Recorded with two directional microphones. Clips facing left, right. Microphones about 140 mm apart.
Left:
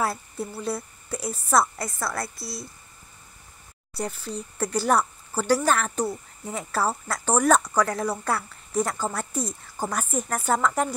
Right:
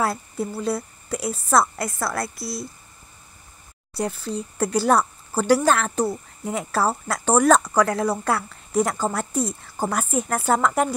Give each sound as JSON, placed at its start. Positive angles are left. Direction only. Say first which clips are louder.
{"t": 0.0, "sound": "a woman's voice", "louder": "right 3 dB", "side_deg": -75}
{"t": 4.7, "sound": "a woman's voice", "louder": "right 3 dB", "side_deg": -75}